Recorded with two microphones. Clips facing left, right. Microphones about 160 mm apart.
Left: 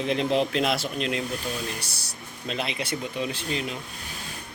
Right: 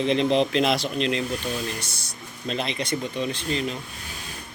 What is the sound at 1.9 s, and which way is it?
Speech, 35° left (ahead or behind).